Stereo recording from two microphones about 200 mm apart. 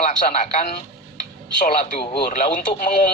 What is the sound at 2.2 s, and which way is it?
Speech, 40° left (ahead or behind).